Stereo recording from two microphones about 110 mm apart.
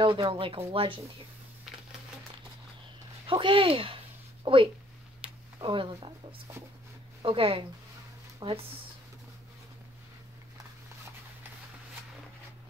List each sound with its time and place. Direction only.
0.0 s speech: 50° right (ahead or behind)
3.3 s speech: 50° right (ahead or behind)